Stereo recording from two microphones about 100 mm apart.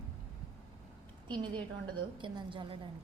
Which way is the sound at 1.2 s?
50° right (ahead or behind).